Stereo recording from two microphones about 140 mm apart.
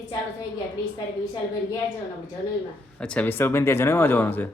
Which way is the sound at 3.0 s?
10° left (ahead or behind).